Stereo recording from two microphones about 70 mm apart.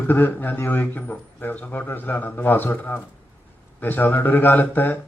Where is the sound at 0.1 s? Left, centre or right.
Left.